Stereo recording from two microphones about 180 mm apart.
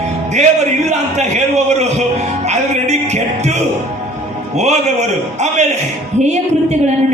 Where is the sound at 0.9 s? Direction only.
40° right (ahead or behind).